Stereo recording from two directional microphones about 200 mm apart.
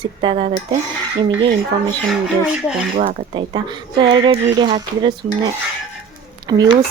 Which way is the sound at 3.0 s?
30° right (ahead or behind).